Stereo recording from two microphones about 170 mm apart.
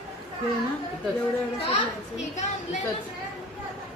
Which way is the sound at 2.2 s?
45° left (ahead or behind).